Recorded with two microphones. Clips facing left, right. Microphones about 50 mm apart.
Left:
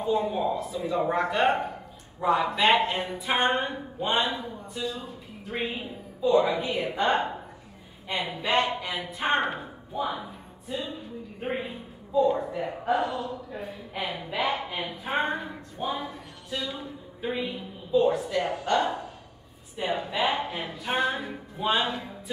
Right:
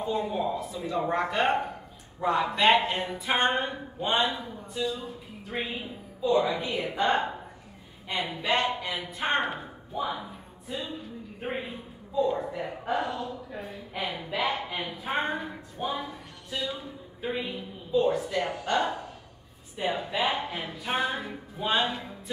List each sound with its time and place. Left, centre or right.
0.0 s a man's voice: centre
6.5 s speech: left
8.5 s speech: centre
9.0 s speech: centre
12.2 s a man's voice: centre